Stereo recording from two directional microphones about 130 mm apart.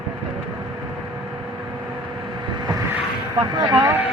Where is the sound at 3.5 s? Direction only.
30° right (ahead or behind).